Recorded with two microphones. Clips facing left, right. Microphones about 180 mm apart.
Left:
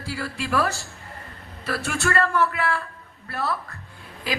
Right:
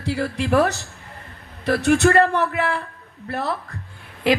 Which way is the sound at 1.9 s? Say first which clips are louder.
Right 9 dB; 20° right (ahead or behind).